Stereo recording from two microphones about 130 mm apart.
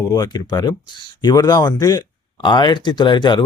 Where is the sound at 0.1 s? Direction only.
30° left (ahead or behind).